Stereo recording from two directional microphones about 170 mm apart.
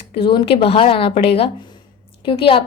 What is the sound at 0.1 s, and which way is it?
A woman's voice, 30° left (ahead or behind).